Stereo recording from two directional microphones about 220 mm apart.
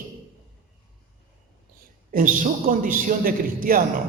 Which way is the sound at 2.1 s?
40° right (ahead or behind).